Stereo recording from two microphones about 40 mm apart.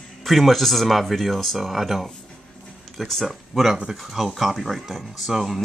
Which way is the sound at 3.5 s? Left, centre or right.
Centre.